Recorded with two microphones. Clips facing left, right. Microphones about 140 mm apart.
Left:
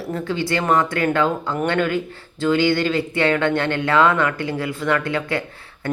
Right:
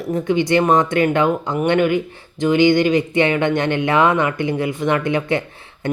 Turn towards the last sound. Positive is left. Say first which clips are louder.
# right 1 dB
turn(degrees=-20)  # may be behind; listen again after turning